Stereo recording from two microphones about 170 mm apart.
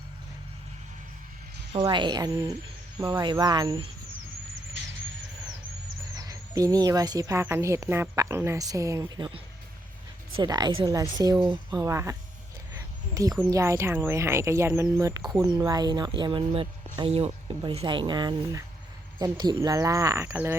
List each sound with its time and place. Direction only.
1.7 s speech: 30° right (ahead or behind)
6.1 s speech: 20° right (ahead or behind)
12.7 s a sound: 20° right (ahead or behind)
13.5 s speech: 20° right (ahead or behind)